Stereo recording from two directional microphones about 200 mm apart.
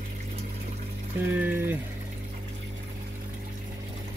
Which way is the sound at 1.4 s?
10° right (ahead or behind).